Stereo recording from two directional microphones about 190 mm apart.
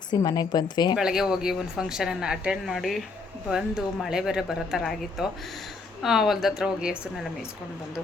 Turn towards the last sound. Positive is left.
turn(degrees=-5)  # may be behind; listen again after turning